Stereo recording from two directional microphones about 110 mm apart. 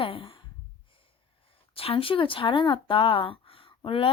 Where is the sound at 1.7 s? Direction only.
60° left (ahead or behind).